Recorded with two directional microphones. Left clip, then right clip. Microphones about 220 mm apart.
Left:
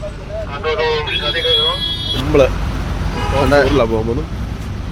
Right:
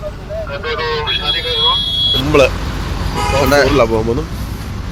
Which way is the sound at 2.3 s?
Centre (ahead or behind).